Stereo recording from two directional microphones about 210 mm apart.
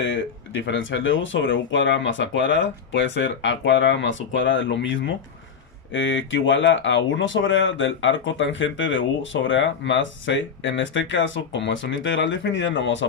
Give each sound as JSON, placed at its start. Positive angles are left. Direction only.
{"t": 0.0, "sound": "speech", "side_deg": 60}